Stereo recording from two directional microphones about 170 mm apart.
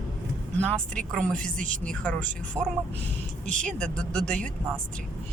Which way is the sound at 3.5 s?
5° left (ahead or behind).